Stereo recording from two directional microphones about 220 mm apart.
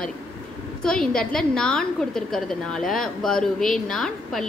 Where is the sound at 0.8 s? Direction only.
5° left (ahead or behind).